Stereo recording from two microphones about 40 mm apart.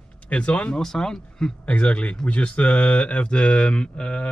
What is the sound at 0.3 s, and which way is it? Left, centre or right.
Speech, left.